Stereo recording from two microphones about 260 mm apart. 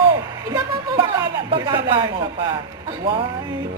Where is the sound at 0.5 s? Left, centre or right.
Centre.